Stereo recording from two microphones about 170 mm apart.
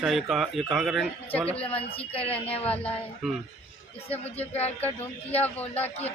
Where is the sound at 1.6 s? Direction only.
35° left (ahead or behind).